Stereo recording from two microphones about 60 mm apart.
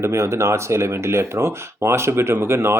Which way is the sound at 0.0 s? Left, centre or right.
Right.